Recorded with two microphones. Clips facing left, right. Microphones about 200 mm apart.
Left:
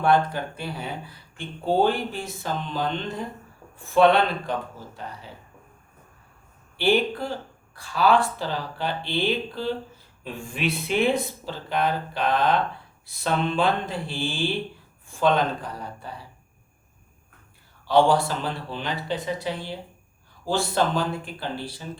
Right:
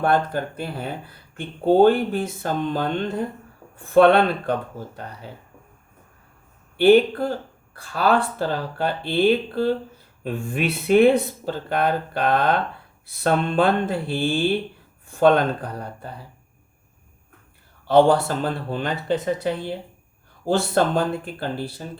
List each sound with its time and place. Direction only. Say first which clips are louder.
0.0 s speech: right 1 dB; 50° right (ahead or behind)
6.7 s speech: right 8 dB; 55° right (ahead or behind)
17.8 s speech: right 4 dB; 55° right (ahead or behind)